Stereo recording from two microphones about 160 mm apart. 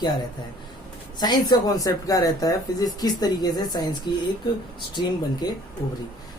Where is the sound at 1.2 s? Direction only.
25° left (ahead or behind).